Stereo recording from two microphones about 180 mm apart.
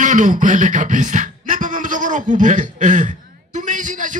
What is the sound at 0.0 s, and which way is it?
Music, 45° right (ahead or behind).